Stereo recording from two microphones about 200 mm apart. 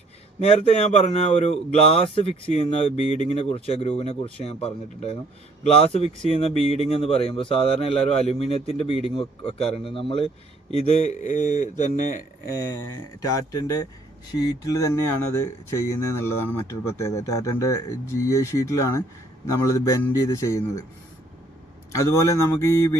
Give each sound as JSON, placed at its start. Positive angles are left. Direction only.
{"t": 0.4, "sound": "speech", "side_deg": 30}
{"t": 12.5, "sound": "speech", "side_deg": 15}
{"t": 21.9, "sound": "speech", "side_deg": 15}